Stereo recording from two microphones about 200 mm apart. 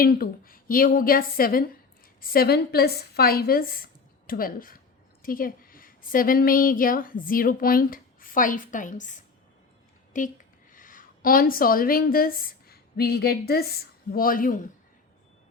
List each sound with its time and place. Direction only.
0.0 s a woman's voice: 45° left (ahead or behind)